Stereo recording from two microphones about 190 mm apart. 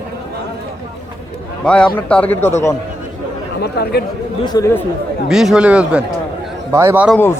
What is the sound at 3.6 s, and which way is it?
Speech, 55° left (ahead or behind).